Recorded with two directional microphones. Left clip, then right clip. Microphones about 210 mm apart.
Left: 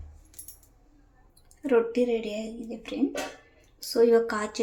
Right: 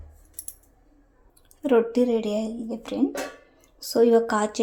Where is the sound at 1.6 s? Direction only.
20° right (ahead or behind).